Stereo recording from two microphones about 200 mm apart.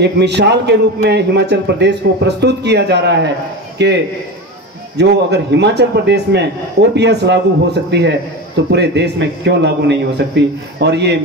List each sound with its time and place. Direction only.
0.0 s a man's voice: 60° right (ahead or behind)